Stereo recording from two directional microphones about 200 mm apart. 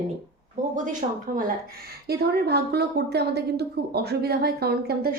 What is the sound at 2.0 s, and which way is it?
A woman's voice, 55° right (ahead or behind).